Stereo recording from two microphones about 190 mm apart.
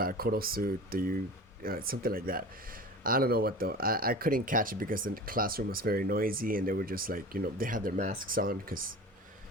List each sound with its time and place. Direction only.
0.0 s speech: 50° right (ahead or behind)